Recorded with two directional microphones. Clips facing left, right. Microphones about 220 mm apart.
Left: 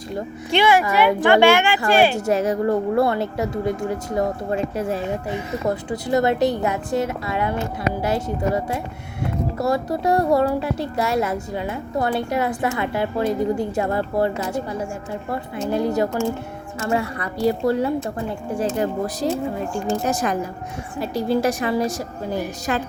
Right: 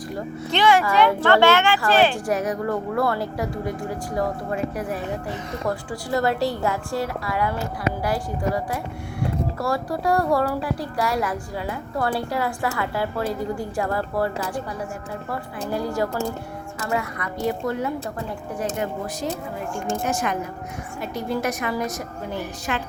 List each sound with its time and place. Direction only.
0.5 s speech: 10° left (ahead or behind)
2.1 s a woman's voice: 25° left (ahead or behind)